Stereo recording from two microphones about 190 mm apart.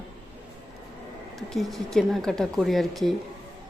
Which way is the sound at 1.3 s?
Centre (ahead or behind).